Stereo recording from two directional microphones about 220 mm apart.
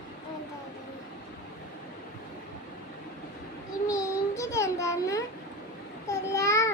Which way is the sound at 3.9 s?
15° left (ahead or behind).